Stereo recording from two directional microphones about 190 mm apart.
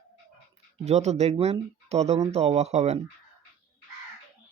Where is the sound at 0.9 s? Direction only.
35° right (ahead or behind).